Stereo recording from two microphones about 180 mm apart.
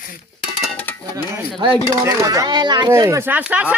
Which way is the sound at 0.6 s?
5° left (ahead or behind).